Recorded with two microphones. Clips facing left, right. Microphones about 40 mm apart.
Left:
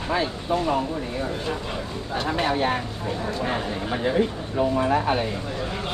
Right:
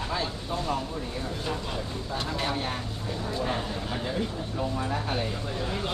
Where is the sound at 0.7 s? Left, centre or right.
Left.